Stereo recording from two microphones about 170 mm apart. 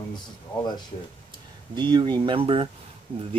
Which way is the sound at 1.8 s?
25° right (ahead or behind).